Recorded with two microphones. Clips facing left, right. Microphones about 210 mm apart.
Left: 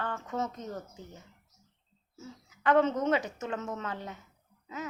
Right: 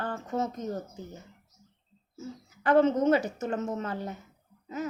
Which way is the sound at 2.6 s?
35° right (ahead or behind).